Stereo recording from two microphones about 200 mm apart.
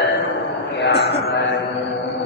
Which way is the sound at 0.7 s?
60° left (ahead or behind).